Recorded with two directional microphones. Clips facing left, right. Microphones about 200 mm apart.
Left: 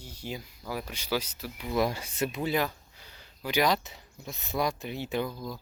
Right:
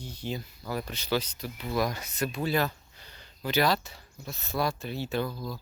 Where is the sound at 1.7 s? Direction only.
25° left (ahead or behind).